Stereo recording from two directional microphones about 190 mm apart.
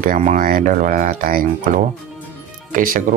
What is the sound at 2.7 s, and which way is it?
Speech, 50° right (ahead or behind).